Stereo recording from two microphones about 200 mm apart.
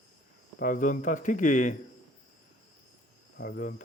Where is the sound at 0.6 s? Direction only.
40° left (ahead or behind).